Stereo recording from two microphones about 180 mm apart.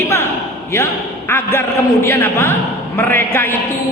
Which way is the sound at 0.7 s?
15° left (ahead or behind).